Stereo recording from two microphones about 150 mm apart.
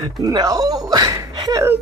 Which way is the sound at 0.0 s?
30° right (ahead or behind).